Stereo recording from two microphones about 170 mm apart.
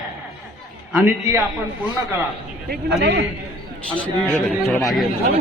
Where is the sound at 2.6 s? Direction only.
70° right (ahead or behind).